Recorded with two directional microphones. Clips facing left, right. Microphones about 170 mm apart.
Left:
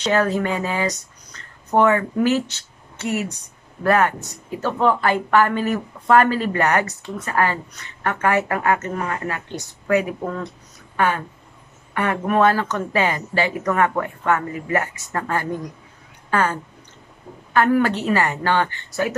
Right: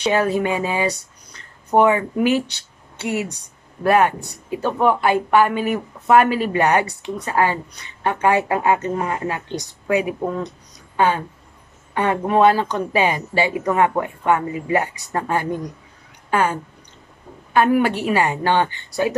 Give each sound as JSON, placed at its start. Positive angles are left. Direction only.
{"t": 0.0, "sound": "a woman's voice", "side_deg": -10}